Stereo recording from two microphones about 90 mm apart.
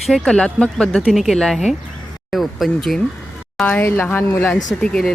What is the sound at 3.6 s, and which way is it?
Speech, 15° left (ahead or behind).